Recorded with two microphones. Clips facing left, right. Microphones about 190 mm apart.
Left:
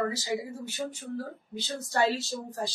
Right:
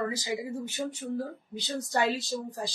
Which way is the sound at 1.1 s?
15° right (ahead or behind).